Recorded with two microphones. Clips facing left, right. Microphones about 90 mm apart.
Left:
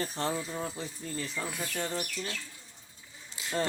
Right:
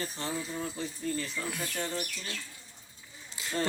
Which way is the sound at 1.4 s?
30° left (ahead or behind).